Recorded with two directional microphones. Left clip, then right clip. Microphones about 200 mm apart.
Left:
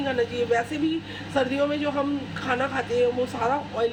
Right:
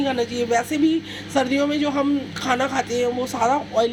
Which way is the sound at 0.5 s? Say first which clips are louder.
Right 8 dB; 20° right (ahead or behind).